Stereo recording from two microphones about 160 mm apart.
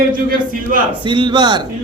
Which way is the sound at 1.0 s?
30° right (ahead or behind).